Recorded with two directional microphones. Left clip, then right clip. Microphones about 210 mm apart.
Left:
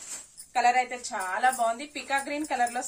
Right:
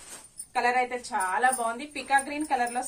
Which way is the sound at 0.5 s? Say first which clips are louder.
Left 2 dB; 15° left (ahead or behind).